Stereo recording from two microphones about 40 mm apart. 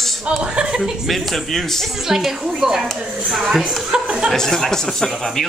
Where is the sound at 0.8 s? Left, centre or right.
Centre.